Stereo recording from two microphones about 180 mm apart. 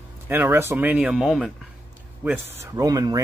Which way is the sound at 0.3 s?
10° right (ahead or behind).